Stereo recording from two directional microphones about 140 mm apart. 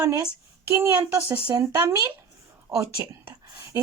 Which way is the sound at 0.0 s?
20° right (ahead or behind).